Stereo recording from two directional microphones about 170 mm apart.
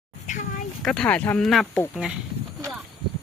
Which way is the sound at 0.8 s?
5° left (ahead or behind).